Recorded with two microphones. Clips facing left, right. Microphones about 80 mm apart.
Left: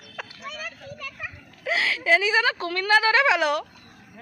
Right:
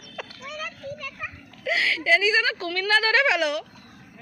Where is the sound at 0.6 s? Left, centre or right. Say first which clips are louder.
Right 3 dB; centre.